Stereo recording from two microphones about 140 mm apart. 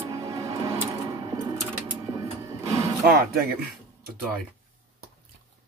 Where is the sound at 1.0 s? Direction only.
30° right (ahead or behind).